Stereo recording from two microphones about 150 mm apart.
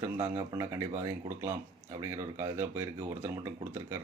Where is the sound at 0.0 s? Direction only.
15° right (ahead or behind).